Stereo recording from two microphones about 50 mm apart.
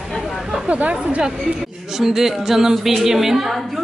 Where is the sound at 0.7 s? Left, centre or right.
Right.